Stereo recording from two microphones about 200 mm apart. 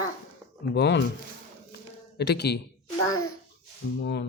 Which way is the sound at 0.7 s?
60° left (ahead or behind).